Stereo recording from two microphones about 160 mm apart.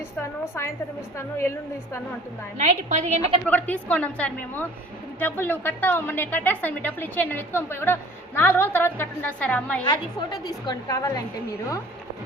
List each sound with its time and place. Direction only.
0.2 s a woman's voice: 15° left (ahead or behind)
2.6 s a woman's voice: 45° right (ahead or behind)
3.4 s a woman's voice: 10° left (ahead or behind)
9.8 s a woman's voice: 30° left (ahead or behind)